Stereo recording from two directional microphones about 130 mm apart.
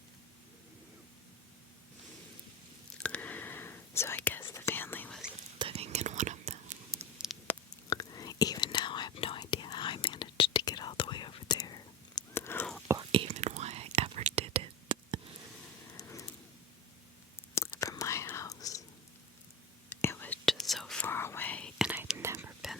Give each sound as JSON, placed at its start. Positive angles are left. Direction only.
{"t": 3.0, "sound": "whispering", "side_deg": 10}
{"t": 5.5, "sound": "whispering", "side_deg": -45}
{"t": 7.3, "sound": "a sound", "side_deg": 0}
{"t": 7.9, "sound": "whispering", "side_deg": 30}
{"t": 12.3, "sound": "whispering", "side_deg": 20}
{"t": 13.0, "sound": "whispering", "side_deg": -40}
{"t": 13.3, "sound": "whispering", "side_deg": -60}
{"t": 16.0, "sound": "a sound", "side_deg": 25}
{"t": 17.5, "sound": "whispering", "side_deg": 25}
{"t": 20.0, "sound": "whispering", "side_deg": 15}
{"t": 20.4, "sound": "whispering", "side_deg": 0}
{"t": 21.0, "sound": "whispering", "side_deg": 20}
{"t": 22.2, "sound": "whispering", "side_deg": -20}